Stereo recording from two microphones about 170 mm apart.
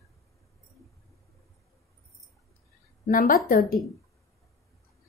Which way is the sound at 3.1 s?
55° left (ahead or behind).